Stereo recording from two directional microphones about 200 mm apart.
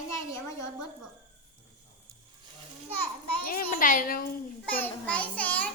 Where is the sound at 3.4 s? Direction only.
45° left (ahead or behind).